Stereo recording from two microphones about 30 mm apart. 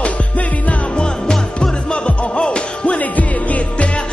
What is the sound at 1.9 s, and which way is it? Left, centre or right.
Music, left.